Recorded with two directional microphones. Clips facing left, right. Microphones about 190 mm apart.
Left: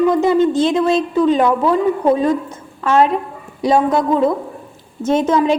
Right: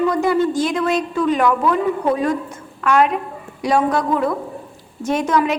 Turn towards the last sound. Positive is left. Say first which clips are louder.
# left 4 dB
turn(degrees=25)  # may be behind; listen again after turning